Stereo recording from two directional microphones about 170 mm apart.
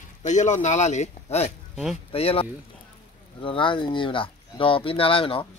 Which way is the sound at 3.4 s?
30° left (ahead or behind).